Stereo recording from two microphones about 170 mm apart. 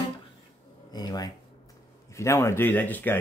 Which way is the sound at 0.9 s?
25° left (ahead or behind).